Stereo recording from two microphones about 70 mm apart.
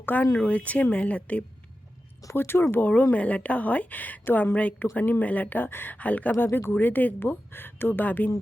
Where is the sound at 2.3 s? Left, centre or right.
Left.